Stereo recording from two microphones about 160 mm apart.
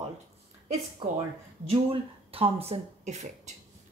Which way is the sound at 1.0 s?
30° right (ahead or behind).